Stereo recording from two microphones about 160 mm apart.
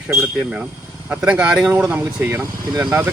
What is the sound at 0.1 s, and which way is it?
Speech, 10° right (ahead or behind).